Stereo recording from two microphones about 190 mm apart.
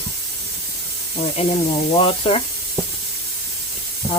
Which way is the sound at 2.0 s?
30° left (ahead or behind).